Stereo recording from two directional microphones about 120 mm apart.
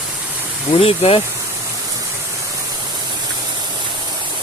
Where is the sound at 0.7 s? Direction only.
55° left (ahead or behind).